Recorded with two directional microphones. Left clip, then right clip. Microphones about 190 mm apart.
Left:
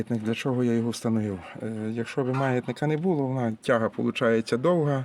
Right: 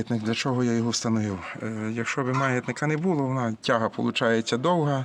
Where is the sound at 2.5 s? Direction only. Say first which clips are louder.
Even; 20° left (ahead or behind).